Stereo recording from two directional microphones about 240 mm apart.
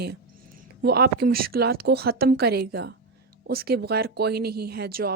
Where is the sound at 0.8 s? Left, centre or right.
Right.